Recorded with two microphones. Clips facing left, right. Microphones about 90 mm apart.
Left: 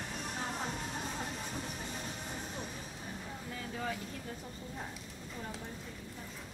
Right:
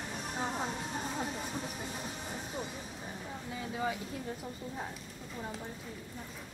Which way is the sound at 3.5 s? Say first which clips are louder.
Right 4 dB; 10° right (ahead or behind).